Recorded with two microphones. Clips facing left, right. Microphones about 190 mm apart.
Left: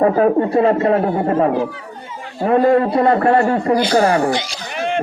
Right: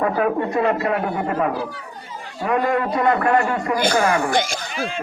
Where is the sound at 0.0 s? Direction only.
35° left (ahead or behind).